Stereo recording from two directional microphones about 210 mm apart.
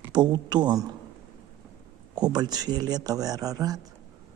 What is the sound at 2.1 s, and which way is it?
Speech, 20° right (ahead or behind).